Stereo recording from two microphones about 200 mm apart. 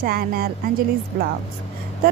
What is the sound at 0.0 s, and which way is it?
Speech, 50° right (ahead or behind).